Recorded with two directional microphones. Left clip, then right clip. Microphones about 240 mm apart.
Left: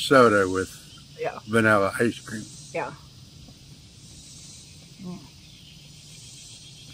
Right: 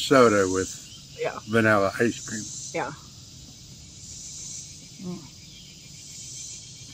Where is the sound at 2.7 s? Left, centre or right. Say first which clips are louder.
Even; centre.